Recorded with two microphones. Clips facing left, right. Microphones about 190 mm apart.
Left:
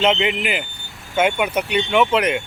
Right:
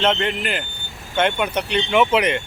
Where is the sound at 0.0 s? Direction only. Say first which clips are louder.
Left 2 dB; 10° left (ahead or behind).